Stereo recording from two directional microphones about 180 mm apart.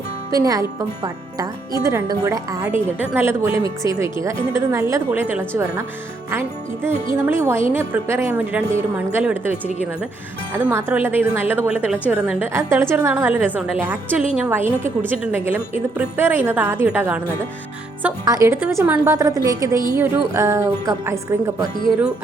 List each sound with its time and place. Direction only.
0.3 s a woman's voice: 20° right (ahead or behind)
6.8 s a woman's voice: 15° right (ahead or behind)